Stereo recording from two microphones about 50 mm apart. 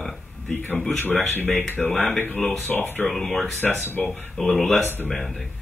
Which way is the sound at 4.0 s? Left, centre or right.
Centre.